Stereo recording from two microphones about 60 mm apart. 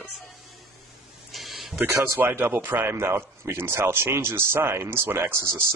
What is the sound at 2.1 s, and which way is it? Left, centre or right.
Speech, right.